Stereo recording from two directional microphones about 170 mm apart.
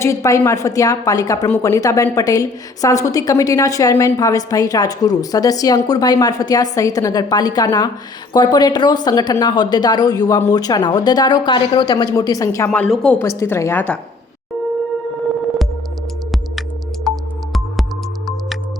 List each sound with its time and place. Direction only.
0.0 s a woman's voice: 20° left (ahead or behind)
13.2 s a woman's voice: 15° left (ahead or behind)
16.3 s music: centre (ahead or behind)